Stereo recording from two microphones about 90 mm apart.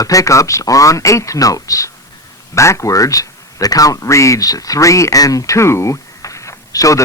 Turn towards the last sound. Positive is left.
turn(degrees=40)  # may be behind; listen again after turning